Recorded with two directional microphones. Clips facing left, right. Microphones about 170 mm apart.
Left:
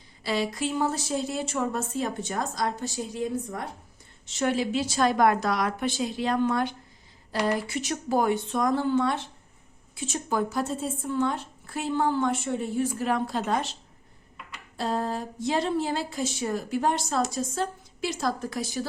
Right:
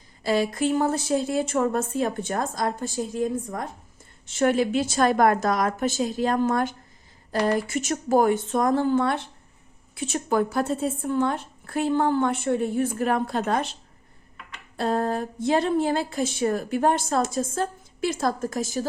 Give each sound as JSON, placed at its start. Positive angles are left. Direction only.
{"t": 0.2, "sound": "speech", "side_deg": -50}
{"t": 14.8, "sound": "speech", "side_deg": -55}